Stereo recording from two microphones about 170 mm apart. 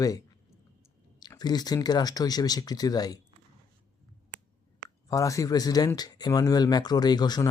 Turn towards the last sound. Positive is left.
turn(degrees=25)  # may be behind; listen again after turning